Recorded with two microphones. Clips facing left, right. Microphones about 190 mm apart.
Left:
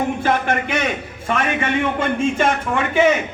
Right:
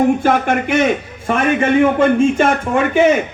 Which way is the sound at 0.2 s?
50° right (ahead or behind).